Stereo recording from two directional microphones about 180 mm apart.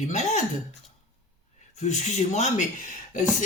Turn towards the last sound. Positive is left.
turn(degrees=45)  # may be behind; listen again after turning